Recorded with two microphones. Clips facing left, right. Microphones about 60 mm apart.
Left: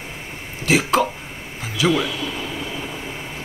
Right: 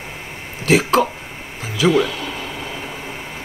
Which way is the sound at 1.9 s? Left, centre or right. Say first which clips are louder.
Right 4 dB; right.